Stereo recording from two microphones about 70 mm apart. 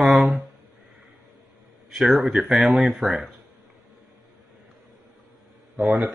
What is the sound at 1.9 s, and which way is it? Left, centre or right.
Speech, centre.